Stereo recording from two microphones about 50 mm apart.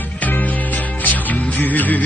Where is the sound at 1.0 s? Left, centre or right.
Left.